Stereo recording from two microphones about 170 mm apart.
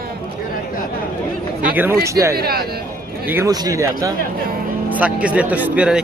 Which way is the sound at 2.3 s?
65° right (ahead or behind).